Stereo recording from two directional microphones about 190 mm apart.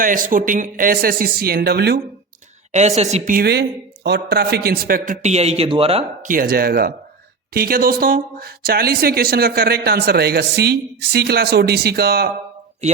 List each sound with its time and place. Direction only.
0.0 s a man's voice: 45° right (ahead or behind)
2.7 s a woman's voice: 35° right (ahead or behind)
3.3 s a man's voice: 55° right (ahead or behind); by 6.1 s 30° right (ahead or behind)
6.2 s a man's voice: 50° right (ahead or behind)